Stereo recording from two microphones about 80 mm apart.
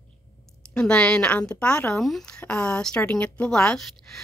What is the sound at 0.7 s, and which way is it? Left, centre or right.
Speech, centre.